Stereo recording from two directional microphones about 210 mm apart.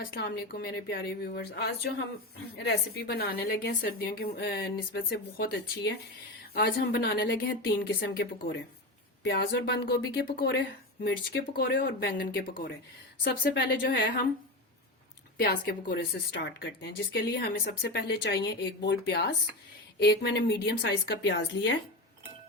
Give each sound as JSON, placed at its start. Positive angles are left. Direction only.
{"t": 0.0, "sound": "a woman's voice", "side_deg": 45}
{"t": 15.4, "sound": "a woman's voice", "side_deg": 50}